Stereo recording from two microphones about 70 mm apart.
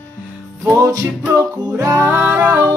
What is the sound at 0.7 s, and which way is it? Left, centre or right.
Music, right.